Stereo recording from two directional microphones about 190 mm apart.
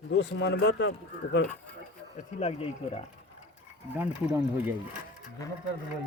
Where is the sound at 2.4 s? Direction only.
35° left (ahead or behind).